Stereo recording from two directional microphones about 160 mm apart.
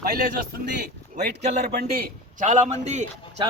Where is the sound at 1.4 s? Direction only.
45° right (ahead or behind).